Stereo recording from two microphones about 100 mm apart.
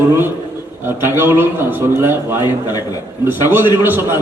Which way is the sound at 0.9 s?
25° right (ahead or behind).